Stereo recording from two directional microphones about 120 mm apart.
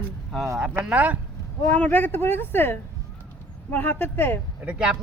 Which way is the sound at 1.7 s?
15° left (ahead or behind).